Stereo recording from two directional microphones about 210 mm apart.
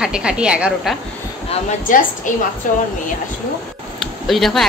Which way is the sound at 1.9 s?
40° left (ahead or behind).